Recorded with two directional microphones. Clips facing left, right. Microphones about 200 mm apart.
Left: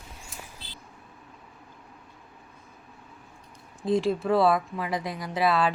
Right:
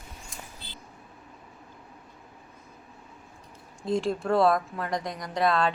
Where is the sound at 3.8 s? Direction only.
Centre (ahead or behind).